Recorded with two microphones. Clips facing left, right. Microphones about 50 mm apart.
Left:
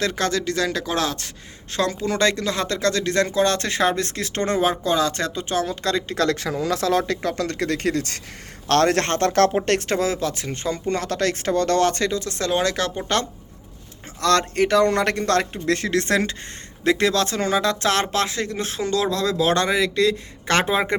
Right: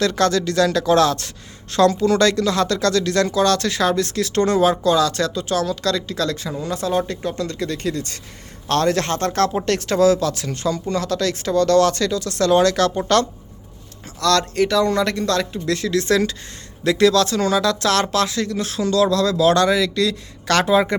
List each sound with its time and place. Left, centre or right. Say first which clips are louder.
0.0 s speech: right 5 dB; centre
6.1 s speech: left 2 dB; left
9.6 s speech: right 5 dB; left
10.8 s speech: left 2 dB; left; by 13.2 s centre
14.2 s speech: right 1 dB; left
14.8 s speech: even; left